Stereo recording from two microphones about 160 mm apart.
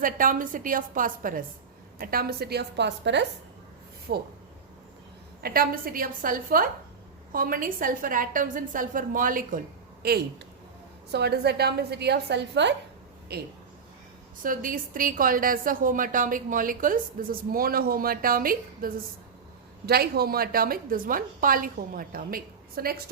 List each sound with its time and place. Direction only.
0.0 s a woman's voice: 60° right (ahead or behind); by 4.2 s 85° right
5.4 s a woman's voice: 70° right (ahead or behind)
11.1 s a woman's voice: 90° right
13.3 s speech: 80° right
14.4 s a woman's voice: 60° right (ahead or behind)
19.8 s a woman's voice: 75° right (ahead or behind)